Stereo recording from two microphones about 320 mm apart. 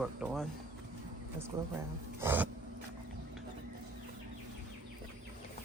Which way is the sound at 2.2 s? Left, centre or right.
Centre.